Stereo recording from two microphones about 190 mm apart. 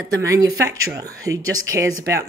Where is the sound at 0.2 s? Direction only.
15° right (ahead or behind).